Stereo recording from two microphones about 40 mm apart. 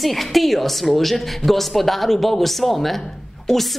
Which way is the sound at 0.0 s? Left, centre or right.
Centre.